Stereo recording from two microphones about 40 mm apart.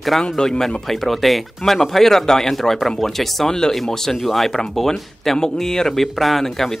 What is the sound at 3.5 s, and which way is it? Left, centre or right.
Speech, centre.